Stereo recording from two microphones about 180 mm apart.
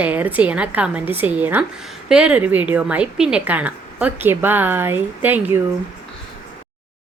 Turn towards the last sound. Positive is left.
turn(degrees=-10)  # may be behind; listen again after turning